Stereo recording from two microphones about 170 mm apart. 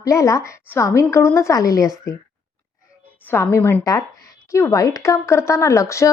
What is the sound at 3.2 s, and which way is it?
A woman's voice, 15° left (ahead or behind).